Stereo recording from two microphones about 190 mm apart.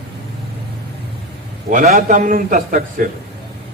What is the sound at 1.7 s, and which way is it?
A man's voice, 45° right (ahead or behind).